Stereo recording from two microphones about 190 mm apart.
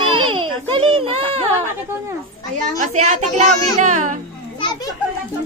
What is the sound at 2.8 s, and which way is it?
A woman's voice, 40° right (ahead or behind).